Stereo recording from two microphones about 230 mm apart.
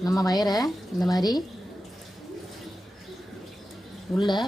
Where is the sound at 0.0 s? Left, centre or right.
Centre.